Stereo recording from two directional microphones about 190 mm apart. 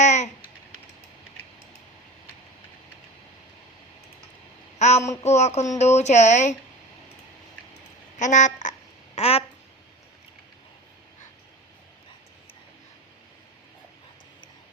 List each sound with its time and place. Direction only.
0.0 s babbling: 40° left (ahead or behind)
4.8 s speech: 35° left (ahead or behind)
8.2 s speech: 40° left (ahead or behind)
9.1 s a sound: 30° left (ahead or behind)